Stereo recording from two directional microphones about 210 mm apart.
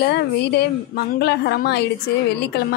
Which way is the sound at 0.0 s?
50° left (ahead or behind).